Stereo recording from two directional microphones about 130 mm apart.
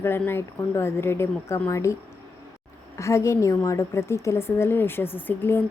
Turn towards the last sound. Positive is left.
turn(degrees=15)  # may be behind; listen again after turning